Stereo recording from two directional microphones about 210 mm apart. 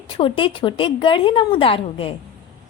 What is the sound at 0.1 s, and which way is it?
A woman's voice, 25° left (ahead or behind).